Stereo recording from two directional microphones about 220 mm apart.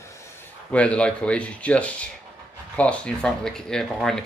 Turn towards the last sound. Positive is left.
turn(degrees=5)  # may be behind; listen again after turning